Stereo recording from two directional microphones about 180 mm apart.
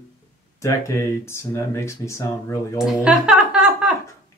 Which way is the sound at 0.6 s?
15° left (ahead or behind).